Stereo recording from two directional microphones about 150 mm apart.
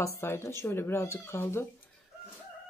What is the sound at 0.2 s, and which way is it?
Speech, 15° left (ahead or behind).